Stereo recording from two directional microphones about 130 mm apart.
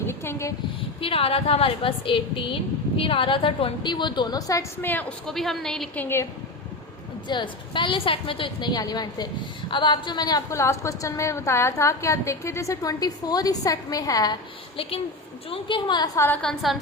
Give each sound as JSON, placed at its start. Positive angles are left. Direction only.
{"t": 0.1, "sound": "a sound", "side_deg": 20}
{"t": 1.0, "sound": "a woman's voice", "side_deg": 45}
{"t": 4.8, "sound": "a woman's voice", "side_deg": 15}
{"t": 7.3, "sound": "a woman's voice", "side_deg": 35}
{"t": 14.8, "sound": "a woman's voice", "side_deg": 45}
{"t": 16.1, "sound": "a woman's voice", "side_deg": 15}
{"t": 16.4, "sound": "a woman's voice", "side_deg": 5}